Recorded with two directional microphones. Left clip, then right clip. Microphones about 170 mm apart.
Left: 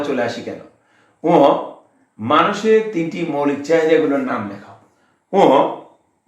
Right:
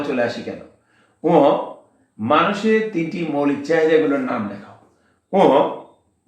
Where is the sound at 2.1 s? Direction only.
20° left (ahead or behind).